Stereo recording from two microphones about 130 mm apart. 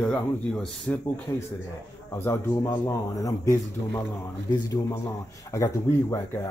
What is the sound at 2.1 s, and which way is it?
Speech, 20° left (ahead or behind).